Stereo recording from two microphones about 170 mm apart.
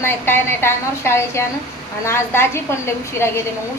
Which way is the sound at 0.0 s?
15° left (ahead or behind).